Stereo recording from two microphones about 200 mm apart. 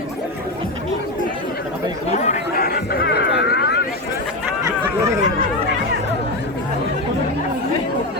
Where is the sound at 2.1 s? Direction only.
35° left (ahead or behind); by 3.8 s 55° left (ahead or behind).